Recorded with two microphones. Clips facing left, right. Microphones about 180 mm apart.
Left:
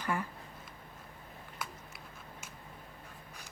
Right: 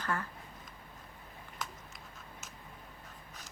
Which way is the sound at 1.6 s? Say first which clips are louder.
Even; 10° left (ahead or behind).